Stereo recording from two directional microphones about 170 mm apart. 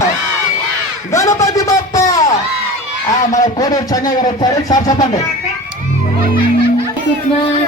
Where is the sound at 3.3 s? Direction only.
20° left (ahead or behind).